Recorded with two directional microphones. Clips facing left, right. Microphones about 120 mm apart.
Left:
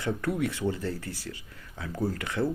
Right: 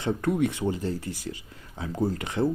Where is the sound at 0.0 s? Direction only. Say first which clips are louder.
Right 4 dB; 25° right (ahead or behind).